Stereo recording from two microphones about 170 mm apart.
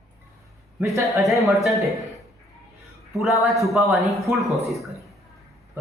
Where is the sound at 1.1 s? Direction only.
Centre (ahead or behind).